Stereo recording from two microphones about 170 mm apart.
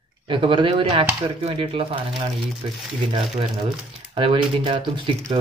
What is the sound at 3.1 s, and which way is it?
Speech, 30° right (ahead or behind).